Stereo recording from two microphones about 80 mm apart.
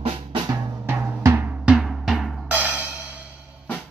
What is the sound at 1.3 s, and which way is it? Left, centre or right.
Drum, right.